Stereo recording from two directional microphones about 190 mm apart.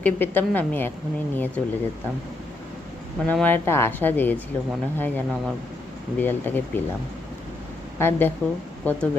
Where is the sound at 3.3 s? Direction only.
10° left (ahead or behind).